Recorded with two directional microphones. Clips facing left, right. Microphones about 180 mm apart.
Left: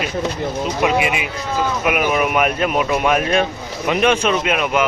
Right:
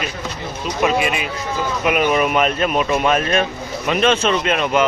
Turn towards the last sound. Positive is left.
turn(degrees=5)  # may be behind; listen again after turning